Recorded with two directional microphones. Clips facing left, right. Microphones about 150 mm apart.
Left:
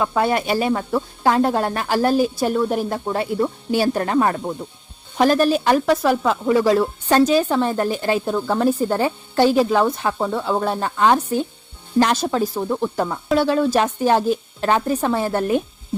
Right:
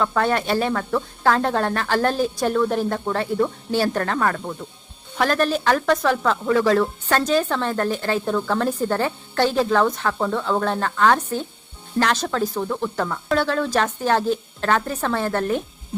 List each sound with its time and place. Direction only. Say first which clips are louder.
0.0 s speech: left 1 dB; 10° left (ahead or behind)